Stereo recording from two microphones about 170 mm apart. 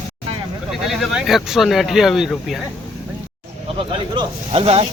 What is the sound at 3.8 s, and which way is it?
Speech, 30° right (ahead or behind).